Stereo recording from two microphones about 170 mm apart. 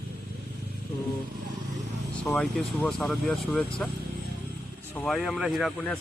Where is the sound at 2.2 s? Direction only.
5° left (ahead or behind).